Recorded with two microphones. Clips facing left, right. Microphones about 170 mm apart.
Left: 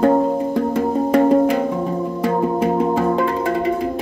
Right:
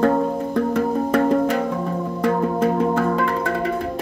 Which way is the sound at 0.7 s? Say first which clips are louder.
Left 4 dB; 15° left (ahead or behind).